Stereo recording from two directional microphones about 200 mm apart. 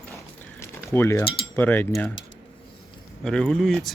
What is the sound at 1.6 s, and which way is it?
Cutlery, 10° left (ahead or behind).